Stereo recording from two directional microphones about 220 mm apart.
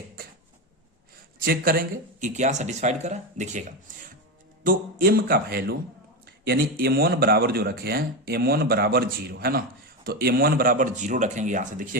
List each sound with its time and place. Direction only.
1.4 s speech: 40° right (ahead or behind)